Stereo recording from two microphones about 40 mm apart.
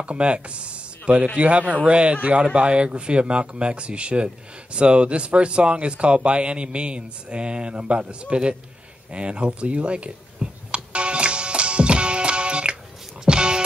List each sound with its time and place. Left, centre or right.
0.0 s speech: right
9.1 s a sound: right
13.2 s music: right